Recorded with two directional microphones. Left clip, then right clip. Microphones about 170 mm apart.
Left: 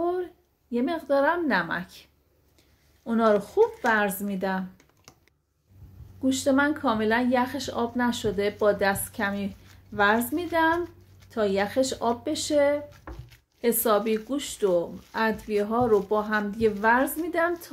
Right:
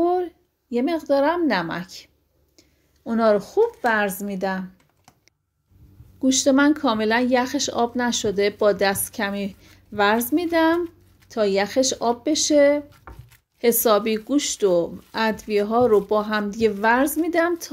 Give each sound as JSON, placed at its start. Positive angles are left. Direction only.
{"t": 0.0, "sound": "a woman's voice", "side_deg": -40}
{"t": 3.1, "sound": "speech", "side_deg": -25}
{"t": 6.2, "sound": "speech", "side_deg": -40}